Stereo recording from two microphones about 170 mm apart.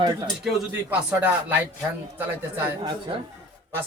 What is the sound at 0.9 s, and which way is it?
Speech, 10° right (ahead or behind).